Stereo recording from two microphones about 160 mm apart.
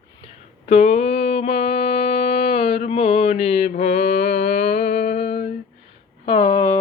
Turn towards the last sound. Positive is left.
turn(degrees=30)  # may be behind; listen again after turning